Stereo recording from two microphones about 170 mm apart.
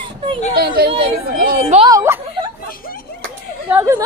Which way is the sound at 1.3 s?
60° right (ahead or behind).